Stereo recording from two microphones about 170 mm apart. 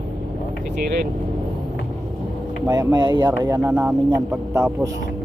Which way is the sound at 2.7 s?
25° right (ahead or behind).